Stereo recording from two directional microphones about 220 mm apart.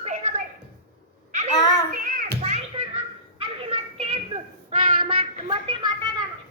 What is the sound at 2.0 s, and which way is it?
Children playing, 40° right (ahead or behind).